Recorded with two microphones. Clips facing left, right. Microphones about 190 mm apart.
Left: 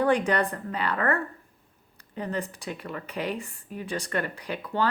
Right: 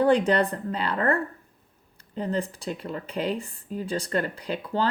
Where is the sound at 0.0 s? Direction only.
25° right (ahead or behind).